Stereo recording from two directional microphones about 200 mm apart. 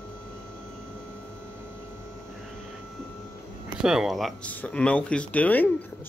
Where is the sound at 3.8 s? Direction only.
Centre (ahead or behind).